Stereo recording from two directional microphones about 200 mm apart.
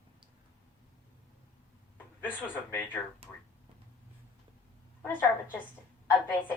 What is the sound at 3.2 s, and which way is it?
Speech, 30° right (ahead or behind).